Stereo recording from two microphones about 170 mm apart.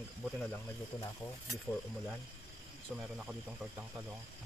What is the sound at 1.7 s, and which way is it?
Speech, 15° left (ahead or behind).